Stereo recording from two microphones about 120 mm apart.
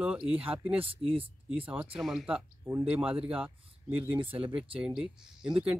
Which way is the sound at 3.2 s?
10° right (ahead or behind).